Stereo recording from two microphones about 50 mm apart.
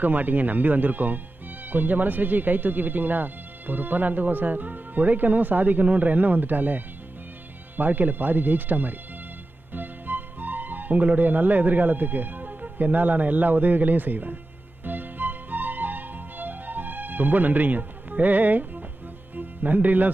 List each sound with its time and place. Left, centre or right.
0.0 s speech: right
14.8 s music: right
19.4 s speech: right